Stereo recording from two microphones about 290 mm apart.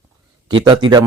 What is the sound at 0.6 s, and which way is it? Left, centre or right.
Speech, centre.